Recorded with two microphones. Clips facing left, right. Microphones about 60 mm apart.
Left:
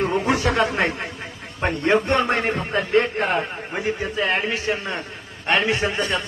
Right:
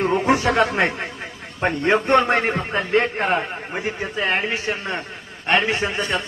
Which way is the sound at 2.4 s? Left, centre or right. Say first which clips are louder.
Even; centre.